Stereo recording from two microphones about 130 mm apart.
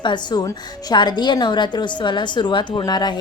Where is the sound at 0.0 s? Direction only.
35° left (ahead or behind).